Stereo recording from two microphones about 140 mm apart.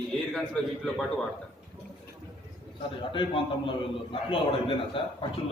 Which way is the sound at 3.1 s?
40° left (ahead or behind).